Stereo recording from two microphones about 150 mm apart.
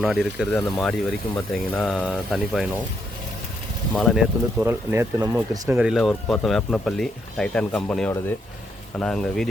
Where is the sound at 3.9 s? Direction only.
5° left (ahead or behind).